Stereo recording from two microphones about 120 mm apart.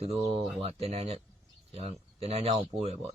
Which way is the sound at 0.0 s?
60° right (ahead or behind).